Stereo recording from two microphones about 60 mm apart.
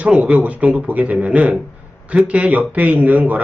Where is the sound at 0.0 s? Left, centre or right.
Centre.